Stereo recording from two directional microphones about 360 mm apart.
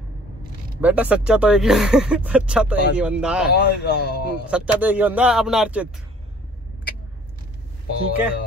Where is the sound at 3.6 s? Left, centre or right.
Left.